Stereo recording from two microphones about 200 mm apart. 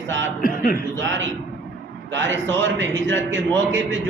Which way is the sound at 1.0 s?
70° right (ahead or behind).